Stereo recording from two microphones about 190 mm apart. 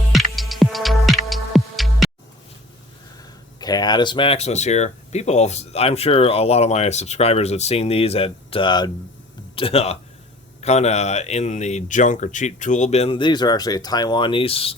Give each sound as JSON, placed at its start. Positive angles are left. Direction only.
{"t": 0.1, "sound": "music", "side_deg": 0}
{"t": 3.6, "sound": "speech", "side_deg": 20}